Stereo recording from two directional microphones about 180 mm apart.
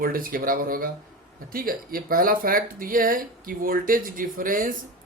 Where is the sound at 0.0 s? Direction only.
55° right (ahead or behind).